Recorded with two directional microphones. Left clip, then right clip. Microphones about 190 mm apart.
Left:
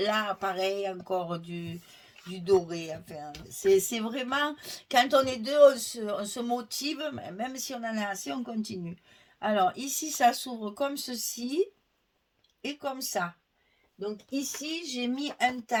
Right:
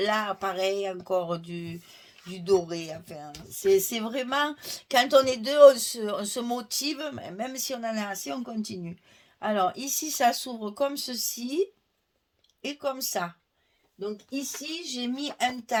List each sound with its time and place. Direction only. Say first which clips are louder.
0.0 s speech: right 2 dB; 35° right (ahead or behind)
12.6 s speech: right 3 dB; 40° right (ahead or behind)
14.8 s speech: right 1 dB; 35° right (ahead or behind)